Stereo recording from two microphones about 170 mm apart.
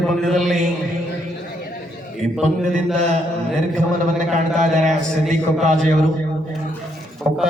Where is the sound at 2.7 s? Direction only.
40° right (ahead or behind).